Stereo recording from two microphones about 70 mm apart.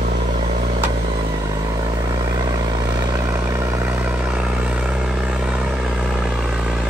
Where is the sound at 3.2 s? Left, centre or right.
Right.